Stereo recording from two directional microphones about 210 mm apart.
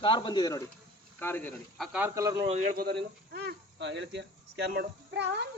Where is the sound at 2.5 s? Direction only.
40° right (ahead or behind); by 5.5 s 55° right (ahead or behind).